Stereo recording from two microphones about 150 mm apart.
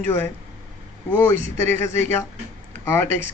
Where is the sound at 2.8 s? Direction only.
15° left (ahead or behind).